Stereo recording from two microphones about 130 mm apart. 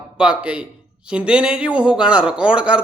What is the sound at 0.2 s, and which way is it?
Speech, 10° right (ahead or behind).